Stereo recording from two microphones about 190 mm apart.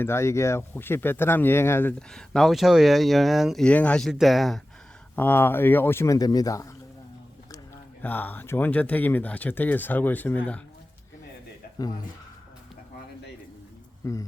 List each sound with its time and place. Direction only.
0.0 s speech: 15° left (ahead or behind)
5.1 s speech: 10° left (ahead or behind)
8.0 s speech: 10° left (ahead or behind)
14.0 s speech: 15° left (ahead or behind)